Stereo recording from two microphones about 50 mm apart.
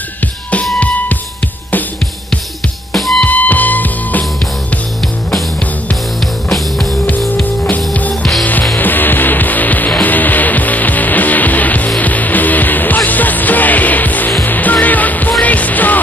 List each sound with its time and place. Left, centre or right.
0.7 s music: left
2.9 s music: centre
3.3 s music: left
7.7 s music: left
8.1 s music: centre
8.7 s music: left